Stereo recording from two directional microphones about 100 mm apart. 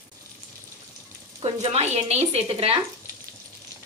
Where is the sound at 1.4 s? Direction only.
85° right.